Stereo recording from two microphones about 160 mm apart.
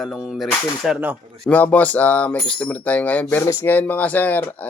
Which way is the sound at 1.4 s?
10° left (ahead or behind).